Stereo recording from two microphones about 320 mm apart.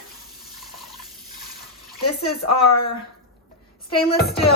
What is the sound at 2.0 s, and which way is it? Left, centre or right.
Speech, left.